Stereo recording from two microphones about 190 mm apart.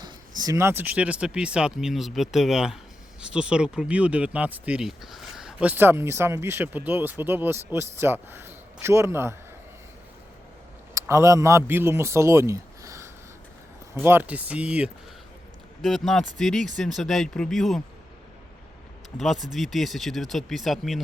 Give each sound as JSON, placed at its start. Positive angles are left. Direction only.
{"t": 0.0, "sound": "a man's voice", "side_deg": -20}
{"t": 11.1, "sound": "a man's voice", "side_deg": -15}
{"t": 19.1, "sound": "speech", "side_deg": 0}